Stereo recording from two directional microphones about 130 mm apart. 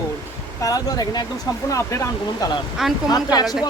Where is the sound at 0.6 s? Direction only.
30° left (ahead or behind).